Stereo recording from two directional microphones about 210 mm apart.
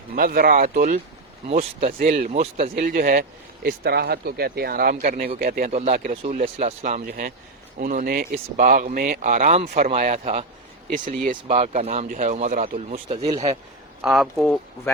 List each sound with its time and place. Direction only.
0.2 s speech: 45° right (ahead or behind); by 1.9 s 30° right (ahead or behind)
1.9 s speech: 40° right (ahead or behind)
2.7 s speech: 40° right (ahead or behind)
7.1 s speech: 45° right (ahead or behind)
14.0 s speech: centre (ahead or behind)